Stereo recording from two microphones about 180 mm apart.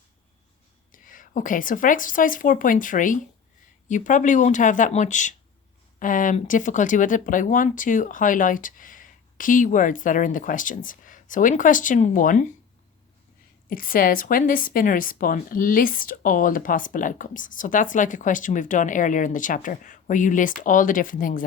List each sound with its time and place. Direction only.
0.9 s a woman's voice: 45° left (ahead or behind)
13.7 s a woman's voice: 50° left (ahead or behind)